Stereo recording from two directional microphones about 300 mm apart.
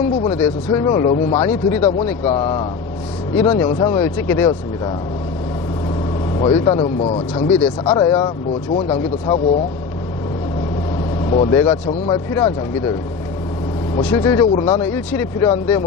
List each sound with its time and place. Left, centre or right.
0.3 s speech: centre
6.4 s speech: centre
11.3 s speech: centre
14.0 s speech: centre